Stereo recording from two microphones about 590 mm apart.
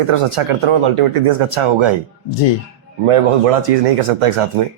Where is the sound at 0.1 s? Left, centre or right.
Right.